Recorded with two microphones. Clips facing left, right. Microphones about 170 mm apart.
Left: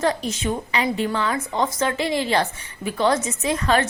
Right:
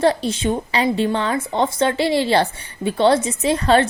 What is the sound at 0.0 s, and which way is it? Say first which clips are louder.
A woman's voice: right 5 dB; 30° right (ahead or behind).